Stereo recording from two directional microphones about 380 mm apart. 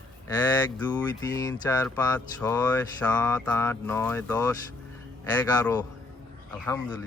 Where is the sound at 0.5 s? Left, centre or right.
Centre.